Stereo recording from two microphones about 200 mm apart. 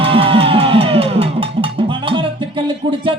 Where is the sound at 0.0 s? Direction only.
25° right (ahead or behind).